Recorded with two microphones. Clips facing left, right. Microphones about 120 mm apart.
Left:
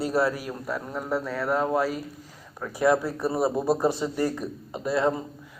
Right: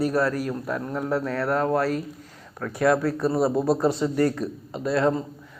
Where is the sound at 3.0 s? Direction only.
20° left (ahead or behind).